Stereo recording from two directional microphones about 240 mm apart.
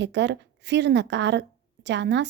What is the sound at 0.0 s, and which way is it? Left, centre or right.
A woman's voice, right.